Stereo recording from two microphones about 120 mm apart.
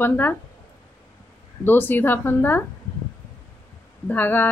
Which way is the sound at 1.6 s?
15° left (ahead or behind).